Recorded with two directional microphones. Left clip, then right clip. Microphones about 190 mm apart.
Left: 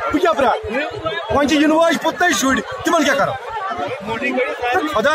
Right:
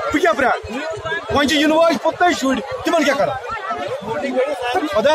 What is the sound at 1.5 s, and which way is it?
A man's voice, centre (ahead or behind).